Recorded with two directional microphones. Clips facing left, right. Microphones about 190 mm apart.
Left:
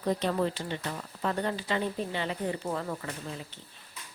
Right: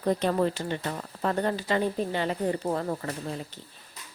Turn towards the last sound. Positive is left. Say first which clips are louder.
# right 5 dB
turn(degrees=-40)  # may be behind; listen again after turning